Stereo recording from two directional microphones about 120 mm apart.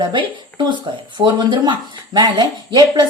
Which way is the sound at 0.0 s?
40° right (ahead or behind).